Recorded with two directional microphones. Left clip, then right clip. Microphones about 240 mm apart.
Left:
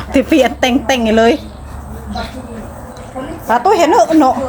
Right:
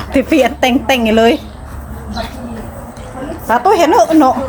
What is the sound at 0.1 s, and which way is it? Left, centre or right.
Speech, centre.